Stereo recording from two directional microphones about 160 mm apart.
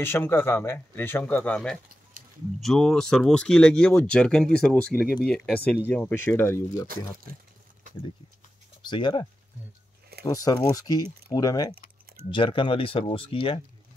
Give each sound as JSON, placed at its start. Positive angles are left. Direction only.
{"t": 0.0, "sound": "speech", "side_deg": 15}
{"t": 8.8, "sound": "speech", "side_deg": 30}